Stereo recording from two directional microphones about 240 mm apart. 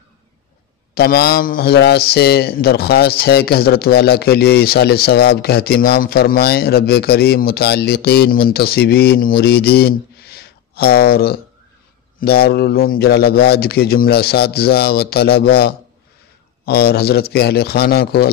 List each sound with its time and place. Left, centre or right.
0.9 s a man's voice: left